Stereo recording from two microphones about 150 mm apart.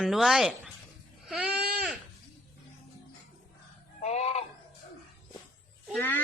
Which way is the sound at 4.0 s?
45° left (ahead or behind).